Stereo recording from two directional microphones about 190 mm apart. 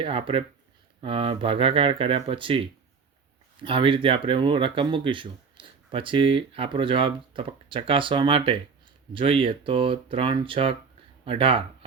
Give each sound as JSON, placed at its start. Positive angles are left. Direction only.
{"t": 0.0, "sound": "speech", "side_deg": -30}